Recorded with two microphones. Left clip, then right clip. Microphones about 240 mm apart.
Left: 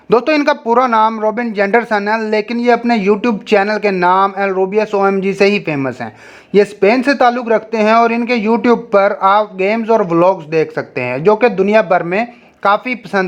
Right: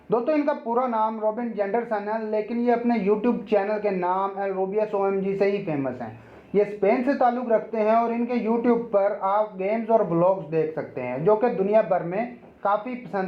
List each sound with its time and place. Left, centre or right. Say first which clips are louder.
0.1 s speech: left 11 dB; left